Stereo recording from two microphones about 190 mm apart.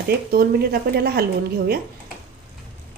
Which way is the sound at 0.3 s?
55° right (ahead or behind).